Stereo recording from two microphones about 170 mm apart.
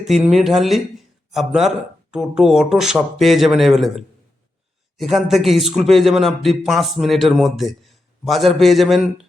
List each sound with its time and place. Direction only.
0.0 s speech: centre (ahead or behind)